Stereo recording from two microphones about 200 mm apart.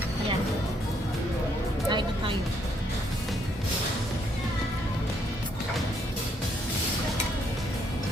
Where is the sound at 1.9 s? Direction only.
25° right (ahead or behind).